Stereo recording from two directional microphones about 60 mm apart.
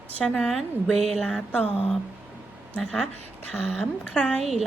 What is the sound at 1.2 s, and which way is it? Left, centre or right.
Speech, centre.